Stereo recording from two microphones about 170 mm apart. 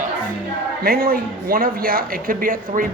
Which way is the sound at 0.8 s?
60° right (ahead or behind).